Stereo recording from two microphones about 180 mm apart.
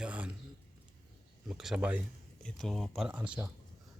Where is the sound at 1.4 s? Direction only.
Centre (ahead or behind).